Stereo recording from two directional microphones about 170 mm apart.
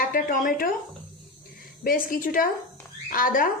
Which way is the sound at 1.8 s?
55° left (ahead or behind).